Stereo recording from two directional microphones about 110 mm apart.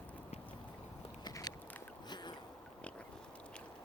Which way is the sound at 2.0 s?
40° left (ahead or behind).